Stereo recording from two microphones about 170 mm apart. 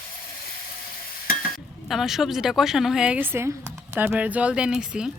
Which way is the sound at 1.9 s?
Centre (ahead or behind).